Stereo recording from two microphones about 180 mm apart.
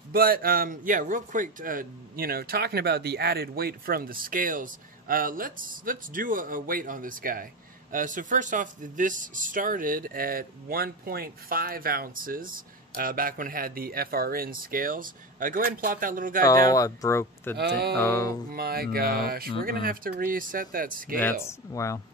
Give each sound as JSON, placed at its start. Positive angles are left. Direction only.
{"t": 0.1, "sound": "speech", "side_deg": -55}
{"t": 16.4, "sound": "speech", "side_deg": 20}
{"t": 17.6, "sound": "speech", "side_deg": -60}
{"t": 17.9, "sound": "speech", "side_deg": 15}
{"t": 18.5, "sound": "speech", "side_deg": -55}
{"t": 21.2, "sound": "speech", "side_deg": 15}